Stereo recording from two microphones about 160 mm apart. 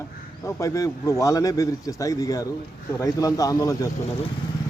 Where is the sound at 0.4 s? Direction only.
20° left (ahead or behind).